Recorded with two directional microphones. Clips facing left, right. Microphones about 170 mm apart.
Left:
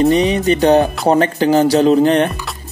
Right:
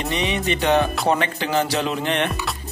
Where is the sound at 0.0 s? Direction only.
40° left (ahead or behind).